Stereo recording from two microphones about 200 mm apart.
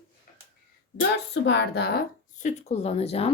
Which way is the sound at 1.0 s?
60° left (ahead or behind).